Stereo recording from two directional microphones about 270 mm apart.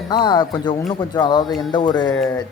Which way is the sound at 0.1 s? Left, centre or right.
Centre.